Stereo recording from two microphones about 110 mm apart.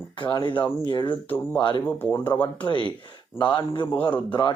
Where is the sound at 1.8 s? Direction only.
20° left (ahead or behind).